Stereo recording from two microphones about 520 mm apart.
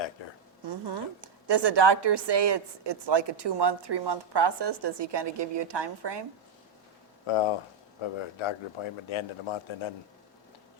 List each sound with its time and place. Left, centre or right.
0.2 s a sound: left
0.6 s a woman's voice: right
7.3 s speech: left